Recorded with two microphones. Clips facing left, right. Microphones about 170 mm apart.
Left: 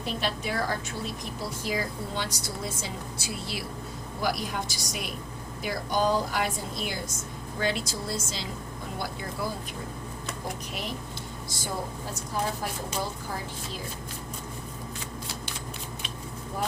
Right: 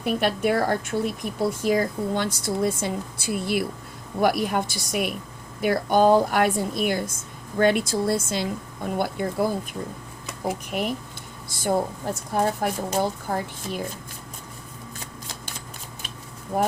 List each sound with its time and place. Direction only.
0.0 s speech: 55° right (ahead or behind)